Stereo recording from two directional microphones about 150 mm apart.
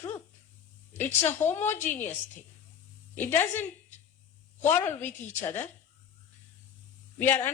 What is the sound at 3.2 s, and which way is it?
A woman's voice, 15° left (ahead or behind).